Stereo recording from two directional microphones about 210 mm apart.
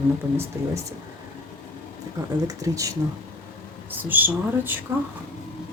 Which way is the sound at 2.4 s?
15° right (ahead or behind).